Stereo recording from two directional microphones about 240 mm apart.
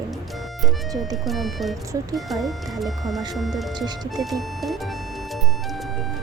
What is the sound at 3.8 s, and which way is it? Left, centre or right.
Speech, centre.